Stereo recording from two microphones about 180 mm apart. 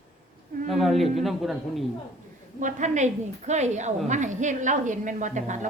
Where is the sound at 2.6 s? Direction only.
45° right (ahead or behind).